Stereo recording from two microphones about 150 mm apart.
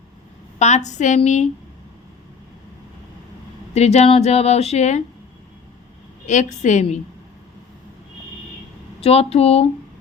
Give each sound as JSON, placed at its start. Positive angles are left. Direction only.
{"t": 0.6, "sound": "speech", "side_deg": 50}
{"t": 3.8, "sound": "speech", "side_deg": 45}
{"t": 6.2, "sound": "speech", "side_deg": 55}
{"t": 9.0, "sound": "speech", "side_deg": 40}